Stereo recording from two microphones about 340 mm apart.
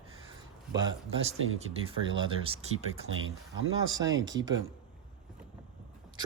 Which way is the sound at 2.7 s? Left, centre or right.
Right.